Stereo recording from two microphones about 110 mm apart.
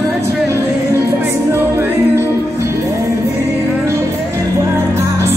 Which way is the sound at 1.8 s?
25° right (ahead or behind).